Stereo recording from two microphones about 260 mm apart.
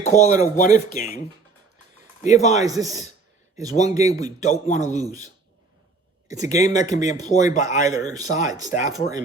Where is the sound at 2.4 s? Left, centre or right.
Left.